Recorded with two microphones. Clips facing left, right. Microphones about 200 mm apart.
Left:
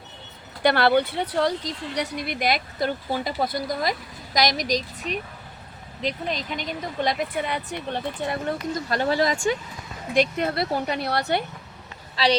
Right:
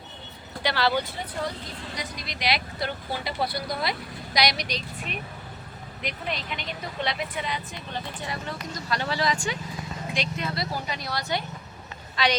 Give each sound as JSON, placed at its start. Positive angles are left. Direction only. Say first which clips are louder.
{"t": 0.6, "sound": "speech", "louder": "left 6 dB", "side_deg": 55}
{"t": 12.1, "sound": "a woman's voice", "louder": "left 4 dB", "side_deg": 30}